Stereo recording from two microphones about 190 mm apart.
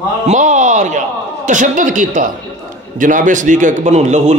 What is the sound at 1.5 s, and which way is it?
A man's voice, 45° right (ahead or behind).